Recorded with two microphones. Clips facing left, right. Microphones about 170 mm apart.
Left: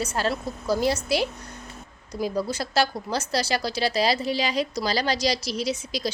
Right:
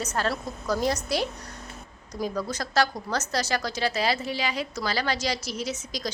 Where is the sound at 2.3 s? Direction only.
30° left (ahead or behind).